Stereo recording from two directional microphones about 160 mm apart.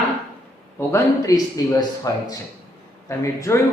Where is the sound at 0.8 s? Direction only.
20° left (ahead or behind).